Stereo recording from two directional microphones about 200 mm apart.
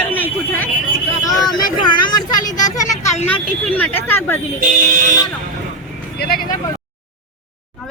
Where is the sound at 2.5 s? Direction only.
15° left (ahead or behind).